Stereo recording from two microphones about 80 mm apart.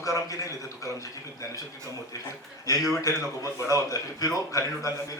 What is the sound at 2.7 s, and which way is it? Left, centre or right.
A man's voice, left.